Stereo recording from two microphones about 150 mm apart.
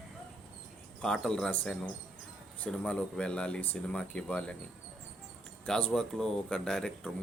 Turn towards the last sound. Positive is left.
turn(degrees=5)  # may be behind; listen again after turning